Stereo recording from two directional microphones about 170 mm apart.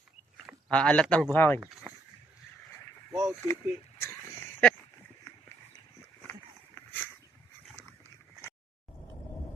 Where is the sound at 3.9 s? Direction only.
15° left (ahead or behind).